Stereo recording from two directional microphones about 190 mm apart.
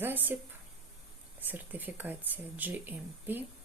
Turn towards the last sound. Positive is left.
turn(degrees=-10)  # may be behind; listen again after turning